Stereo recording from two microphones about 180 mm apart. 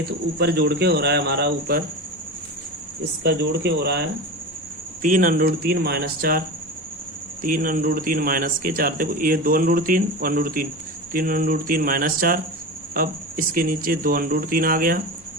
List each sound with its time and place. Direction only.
0.3 s speech: 65° right (ahead or behind)
3.2 s speech: 70° right (ahead or behind)
5.0 s speech: 50° right (ahead or behind)
7.4 s speech: 50° right (ahead or behind)